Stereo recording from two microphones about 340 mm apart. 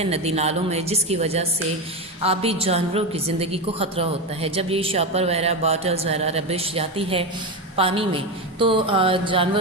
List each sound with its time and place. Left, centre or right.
0.0 s a woman's voice: centre